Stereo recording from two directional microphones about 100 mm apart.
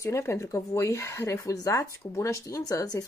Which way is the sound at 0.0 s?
25° left (ahead or behind).